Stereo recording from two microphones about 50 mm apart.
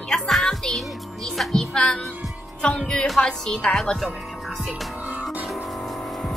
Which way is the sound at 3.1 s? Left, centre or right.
Centre.